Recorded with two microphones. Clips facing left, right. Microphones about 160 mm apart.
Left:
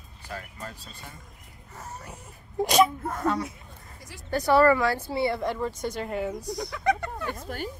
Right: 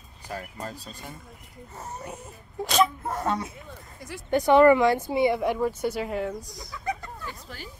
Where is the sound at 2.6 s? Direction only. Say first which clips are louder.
Left 2 dB; 15° left (ahead or behind).